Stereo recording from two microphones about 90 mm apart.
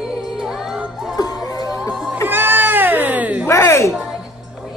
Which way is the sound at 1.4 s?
40° left (ahead or behind).